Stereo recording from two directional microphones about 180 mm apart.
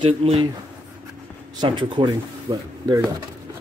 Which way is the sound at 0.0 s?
30° right (ahead or behind).